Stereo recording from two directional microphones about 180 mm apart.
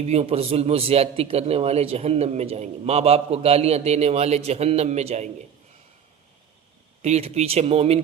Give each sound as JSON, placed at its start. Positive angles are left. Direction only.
{"t": 0.0, "sound": "a man's voice", "side_deg": -35}
{"t": 7.0, "sound": "a man's voice", "side_deg": -35}